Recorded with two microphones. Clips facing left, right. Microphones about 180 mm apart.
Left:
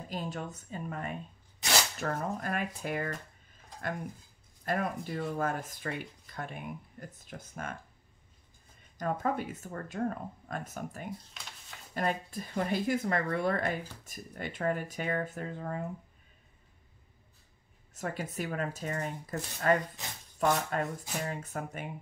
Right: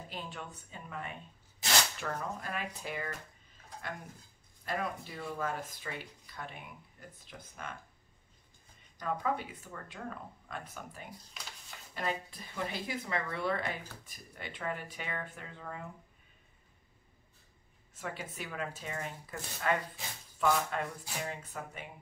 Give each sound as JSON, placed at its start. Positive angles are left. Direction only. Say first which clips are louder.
{"t": 0.1, "sound": "speech", "louder": "left 8 dB", "side_deg": 40}
{"t": 4.6, "sound": "speech", "louder": "left 4 dB", "side_deg": 50}
{"t": 8.9, "sound": "speech", "louder": "left 3 dB", "side_deg": 45}
{"t": 11.4, "sound": "a sound", "louder": "even", "side_deg": 0}
{"t": 11.9, "sound": "speech", "louder": "left 4 dB", "side_deg": 45}
{"t": 17.9, "sound": "speech", "louder": "left 5 dB", "side_deg": 45}